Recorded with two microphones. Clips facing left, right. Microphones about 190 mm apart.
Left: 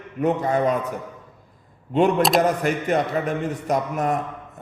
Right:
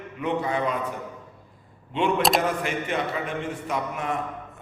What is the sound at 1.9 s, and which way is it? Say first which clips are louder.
Mantra: left 6 dB; 40° left (ahead or behind).